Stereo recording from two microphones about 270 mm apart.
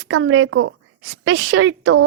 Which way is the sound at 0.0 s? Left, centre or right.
Right.